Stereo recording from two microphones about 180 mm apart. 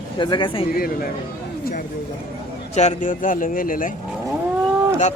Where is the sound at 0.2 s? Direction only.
25° left (ahead or behind).